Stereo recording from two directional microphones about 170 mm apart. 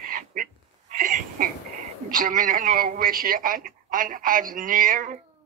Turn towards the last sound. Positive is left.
turn(degrees=-55)  # may be behind; listen again after turning